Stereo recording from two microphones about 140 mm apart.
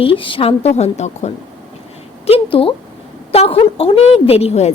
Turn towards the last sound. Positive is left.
turn(degrees=50)  # may be behind; listen again after turning